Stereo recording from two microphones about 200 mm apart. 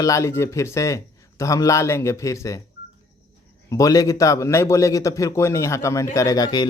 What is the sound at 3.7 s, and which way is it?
Speech, 15° left (ahead or behind).